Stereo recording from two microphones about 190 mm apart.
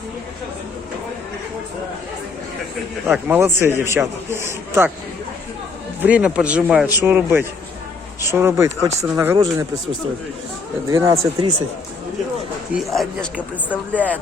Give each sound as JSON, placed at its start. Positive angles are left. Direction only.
{"t": 3.1, "sound": "speech", "side_deg": -10}
{"t": 6.0, "sound": "speech", "side_deg": -5}
{"t": 10.8, "sound": "speech", "side_deg": -15}
{"t": 12.7, "sound": "speech", "side_deg": 0}
{"t": 13.9, "sound": "speech", "side_deg": 10}